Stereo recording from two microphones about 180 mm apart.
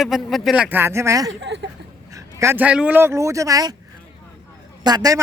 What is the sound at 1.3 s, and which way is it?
Speech, 85° right.